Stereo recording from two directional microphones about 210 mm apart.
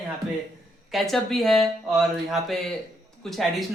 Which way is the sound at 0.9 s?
Centre (ahead or behind).